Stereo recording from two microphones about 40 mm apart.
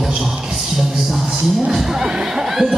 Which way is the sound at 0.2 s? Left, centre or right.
Centre.